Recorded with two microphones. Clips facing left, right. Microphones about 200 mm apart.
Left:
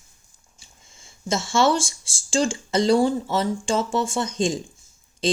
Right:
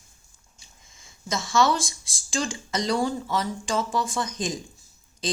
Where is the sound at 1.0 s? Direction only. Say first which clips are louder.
Left 5 dB; 30° left (ahead or behind).